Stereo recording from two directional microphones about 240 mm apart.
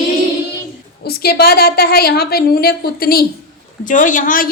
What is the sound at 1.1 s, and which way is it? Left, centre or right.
A woman's voice, left.